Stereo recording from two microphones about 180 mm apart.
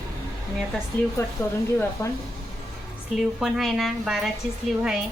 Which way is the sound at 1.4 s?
15° left (ahead or behind).